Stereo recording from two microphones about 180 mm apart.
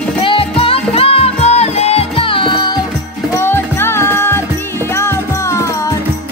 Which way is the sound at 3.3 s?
15° left (ahead or behind).